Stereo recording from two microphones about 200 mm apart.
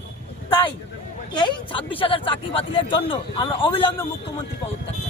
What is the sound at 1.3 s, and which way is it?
Speech, 20° left (ahead or behind).